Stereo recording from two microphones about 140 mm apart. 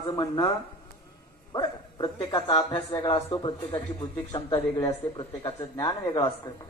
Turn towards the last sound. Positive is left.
turn(degrees=30)  # may be behind; listen again after turning